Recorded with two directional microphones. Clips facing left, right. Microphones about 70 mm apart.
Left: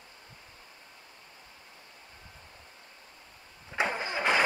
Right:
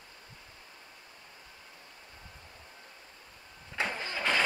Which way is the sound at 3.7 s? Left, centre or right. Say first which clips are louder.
Left 4 dB; left.